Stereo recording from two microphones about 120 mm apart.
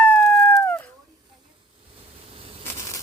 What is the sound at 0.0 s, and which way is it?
Howl, 10° left (ahead or behind).